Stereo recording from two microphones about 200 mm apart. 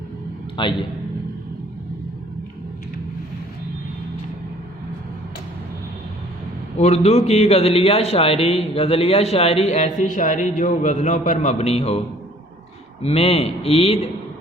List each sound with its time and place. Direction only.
0.5 s speech: 25° left (ahead or behind)
6.7 s a man's voice: 35° left (ahead or behind)